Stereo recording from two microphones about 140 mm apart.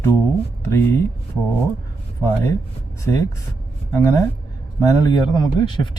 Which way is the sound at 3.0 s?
20° left (ahead or behind).